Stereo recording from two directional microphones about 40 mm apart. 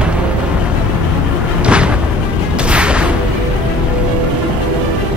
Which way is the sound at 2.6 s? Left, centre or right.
Right.